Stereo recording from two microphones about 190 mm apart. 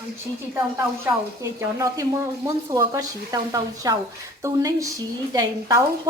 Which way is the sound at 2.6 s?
15° right (ahead or behind).